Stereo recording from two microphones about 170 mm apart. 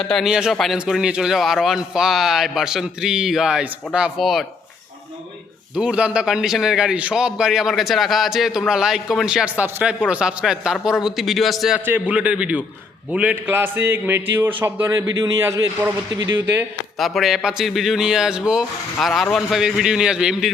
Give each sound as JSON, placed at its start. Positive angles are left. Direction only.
{"t": 0.0, "sound": "a man's voice", "side_deg": 0}
{"t": 5.7, "sound": "a man's voice", "side_deg": -5}
{"t": 17.0, "sound": "a man's voice", "side_deg": 0}